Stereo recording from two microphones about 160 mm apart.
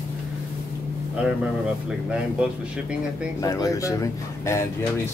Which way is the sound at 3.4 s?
20° left (ahead or behind).